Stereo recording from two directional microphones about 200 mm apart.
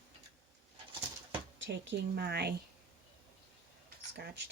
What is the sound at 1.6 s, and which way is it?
Speech, 65° right (ahead or behind).